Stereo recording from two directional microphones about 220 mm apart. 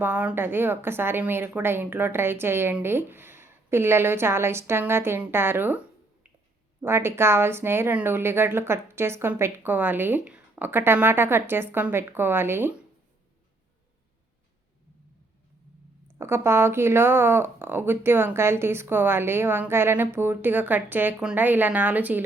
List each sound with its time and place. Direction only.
0.0 s speech: 10° right (ahead or behind)
6.8 s speech: 10° right (ahead or behind)
16.1 s speech: 10° right (ahead or behind)